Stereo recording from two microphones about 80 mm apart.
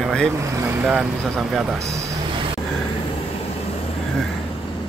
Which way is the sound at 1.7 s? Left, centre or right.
Right.